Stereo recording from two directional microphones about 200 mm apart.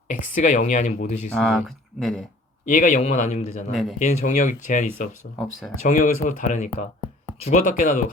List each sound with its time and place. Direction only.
0.3 s speech: 35° left (ahead or behind)
1.3 s speech: 5° left (ahead or behind)
2.6 s speech: 40° left (ahead or behind)
3.7 s speech: centre (ahead or behind)
3.9 s speech: 35° left (ahead or behind)